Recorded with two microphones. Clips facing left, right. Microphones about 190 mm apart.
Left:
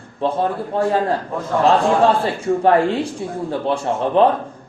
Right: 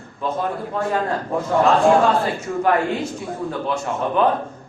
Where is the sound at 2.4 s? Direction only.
30° left (ahead or behind).